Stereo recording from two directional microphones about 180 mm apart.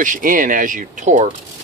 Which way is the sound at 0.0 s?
50° right (ahead or behind).